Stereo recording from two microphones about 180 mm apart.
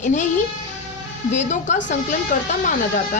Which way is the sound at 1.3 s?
40° left (ahead or behind).